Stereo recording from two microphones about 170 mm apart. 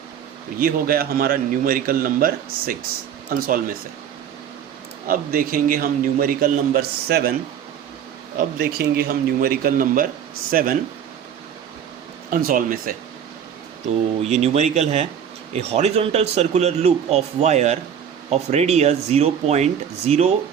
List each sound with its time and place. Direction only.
0.6 s a man's voice: 60° right (ahead or behind)
5.0 s a man's voice: 55° right (ahead or behind)
8.4 s a man's voice: 60° right (ahead or behind)
12.3 s a man's voice: 55° right (ahead or behind)
14.4 s a man's voice: 40° right (ahead or behind)